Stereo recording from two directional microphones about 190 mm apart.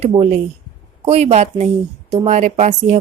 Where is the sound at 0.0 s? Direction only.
30° right (ahead or behind).